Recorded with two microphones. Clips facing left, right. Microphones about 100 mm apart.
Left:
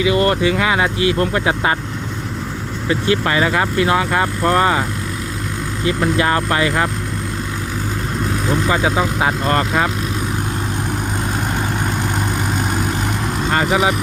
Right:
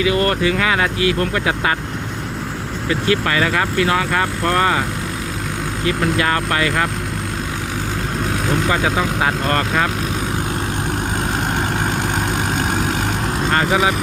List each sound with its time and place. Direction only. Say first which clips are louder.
0.0 s speech: left 2 dB; 20° left (ahead or behind)
2.9 s speech: left 1 dB; 25° left (ahead or behind)
5.8 s speech: left 2 dB; 25° left (ahead or behind)
8.6 s speech: left 3 dB; 25° left (ahead or behind)
13.5 s vehicle: even; 10° left (ahead or behind)